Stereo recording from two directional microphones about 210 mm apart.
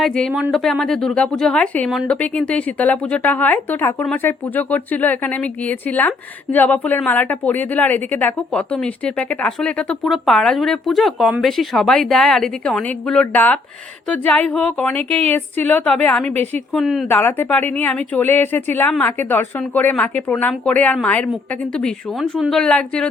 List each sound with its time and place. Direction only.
0.0 s speech: centre (ahead or behind)
16.3 s a woman's voice: 30° right (ahead or behind)
16.7 s speech: centre (ahead or behind)